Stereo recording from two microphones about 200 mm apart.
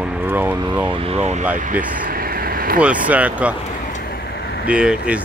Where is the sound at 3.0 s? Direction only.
5° right (ahead or behind).